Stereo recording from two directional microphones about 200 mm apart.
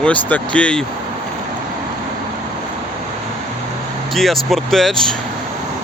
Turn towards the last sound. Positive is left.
turn(degrees=0)  # may be behind; listen again after turning